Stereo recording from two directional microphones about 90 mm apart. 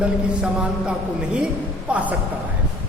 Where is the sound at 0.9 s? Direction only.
10° right (ahead or behind).